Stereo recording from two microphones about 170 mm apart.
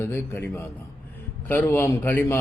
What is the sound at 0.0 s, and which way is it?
Speech, 15° left (ahead or behind).